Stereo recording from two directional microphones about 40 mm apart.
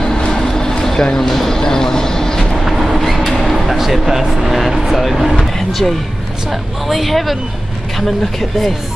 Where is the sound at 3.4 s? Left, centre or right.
Centre.